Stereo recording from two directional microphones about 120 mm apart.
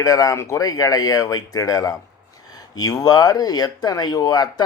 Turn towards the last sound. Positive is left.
turn(degrees=35)  # may be behind; listen again after turning